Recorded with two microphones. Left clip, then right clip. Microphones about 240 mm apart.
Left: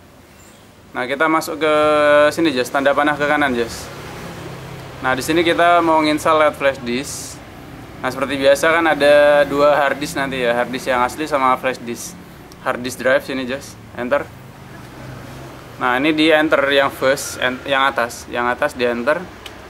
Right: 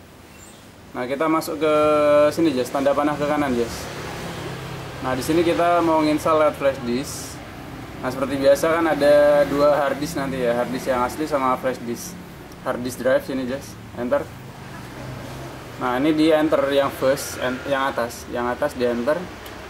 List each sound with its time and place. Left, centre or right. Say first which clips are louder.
0.9 s speech: left 5 dB; centre
5.0 s speech: left 4 dB; centre
15.8 s speech: left 4 dB; centre